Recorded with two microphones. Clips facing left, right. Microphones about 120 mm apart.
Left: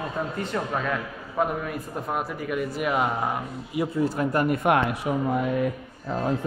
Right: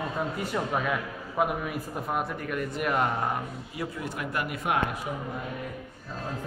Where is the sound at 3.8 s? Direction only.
35° left (ahead or behind).